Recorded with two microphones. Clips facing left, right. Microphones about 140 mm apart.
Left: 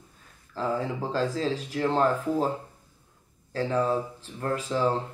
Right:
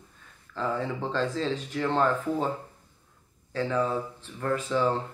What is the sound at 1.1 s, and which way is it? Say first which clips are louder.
Speech: left 2 dB; 35° left (ahead or behind).